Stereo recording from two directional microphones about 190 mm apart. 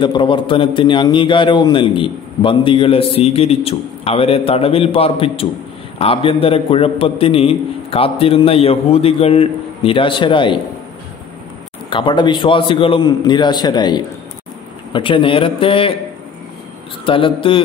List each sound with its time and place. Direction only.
0.0 s a man's voice: 25° left (ahead or behind)
11.9 s a man's voice: 25° left (ahead or behind)
17.0 s a man's voice: 25° left (ahead or behind)